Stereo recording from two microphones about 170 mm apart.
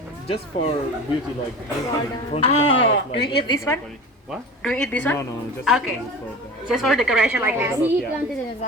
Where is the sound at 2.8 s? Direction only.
90° left.